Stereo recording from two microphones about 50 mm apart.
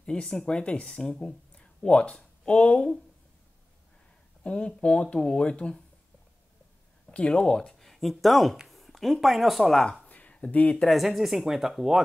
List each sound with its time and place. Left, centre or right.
0.0 s speech: centre
4.5 s speech: centre
7.1 s speech: centre
10.0 s a sound: left
10.9 s speech: centre